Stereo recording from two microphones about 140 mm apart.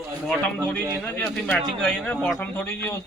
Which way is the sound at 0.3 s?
10° left (ahead or behind).